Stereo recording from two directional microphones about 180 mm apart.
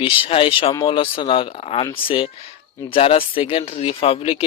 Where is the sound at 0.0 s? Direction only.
30° left (ahead or behind).